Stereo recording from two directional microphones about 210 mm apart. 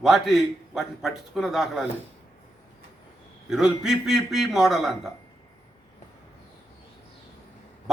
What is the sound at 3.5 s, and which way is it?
A man's voice, centre (ahead or behind).